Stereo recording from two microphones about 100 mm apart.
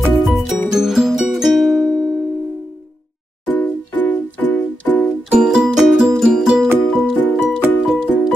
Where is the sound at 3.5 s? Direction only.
20° left (ahead or behind).